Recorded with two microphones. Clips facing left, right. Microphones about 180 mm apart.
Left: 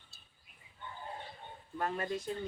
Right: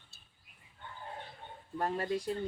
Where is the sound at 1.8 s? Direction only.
35° right (ahead or behind).